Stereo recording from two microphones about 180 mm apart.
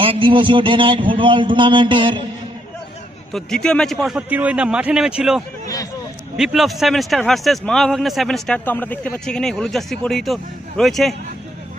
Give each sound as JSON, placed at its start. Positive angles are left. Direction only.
{"t": 0.0, "sound": "a man's voice", "side_deg": -30}
{"t": 3.3, "sound": "a man's voice", "side_deg": 5}
{"t": 5.6, "sound": "speech", "side_deg": 20}
{"t": 6.3, "sound": "a man's voice", "side_deg": 0}